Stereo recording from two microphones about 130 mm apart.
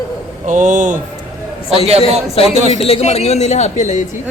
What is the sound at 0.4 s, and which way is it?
Speech, 75° right (ahead or behind).